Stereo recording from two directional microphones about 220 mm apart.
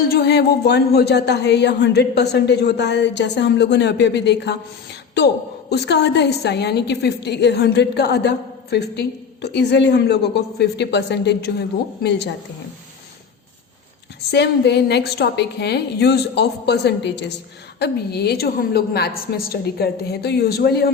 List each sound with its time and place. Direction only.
0.1 s a woman's voice: 50° left (ahead or behind)
14.3 s a woman's voice: 50° left (ahead or behind)